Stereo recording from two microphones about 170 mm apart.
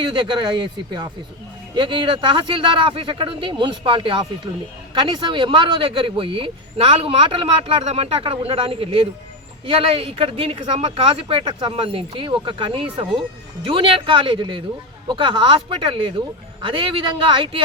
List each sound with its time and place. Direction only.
0.0 s speech: 25° right (ahead or behind)